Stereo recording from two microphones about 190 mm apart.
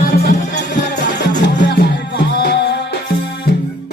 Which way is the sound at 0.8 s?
65° left (ahead or behind).